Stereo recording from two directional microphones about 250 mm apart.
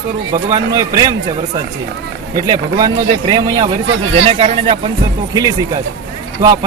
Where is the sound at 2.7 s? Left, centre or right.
Centre.